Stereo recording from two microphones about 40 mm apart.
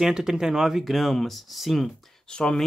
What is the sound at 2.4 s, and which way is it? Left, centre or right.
Speech, centre.